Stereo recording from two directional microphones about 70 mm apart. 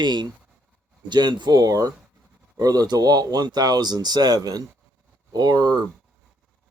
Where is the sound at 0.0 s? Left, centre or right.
Right.